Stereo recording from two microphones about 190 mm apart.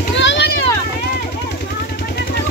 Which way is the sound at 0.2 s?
70° left (ahead or behind).